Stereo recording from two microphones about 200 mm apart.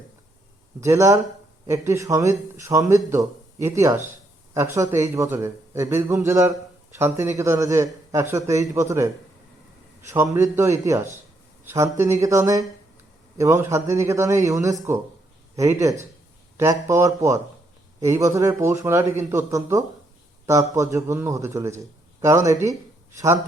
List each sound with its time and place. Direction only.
0.8 s a man's voice: 15° right (ahead or behind)